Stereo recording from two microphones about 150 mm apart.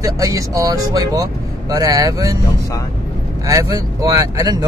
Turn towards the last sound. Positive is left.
turn(degrees=-25)  # may be behind; listen again after turning